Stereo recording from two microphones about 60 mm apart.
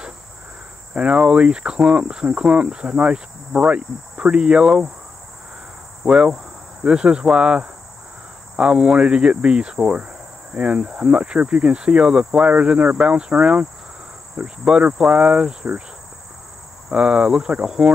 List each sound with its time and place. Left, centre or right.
0.9 s speech: centre
6.0 s speech: centre
16.9 s speech: centre